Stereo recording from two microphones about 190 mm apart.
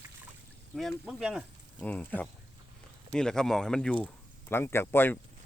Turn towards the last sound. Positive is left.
turn(degrees=10)  # may be behind; listen again after turning